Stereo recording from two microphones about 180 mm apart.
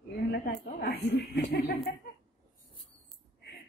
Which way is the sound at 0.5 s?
55° left (ahead or behind).